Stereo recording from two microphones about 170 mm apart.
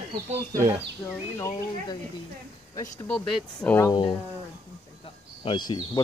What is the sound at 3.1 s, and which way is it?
Speech, 5° left (ahead or behind).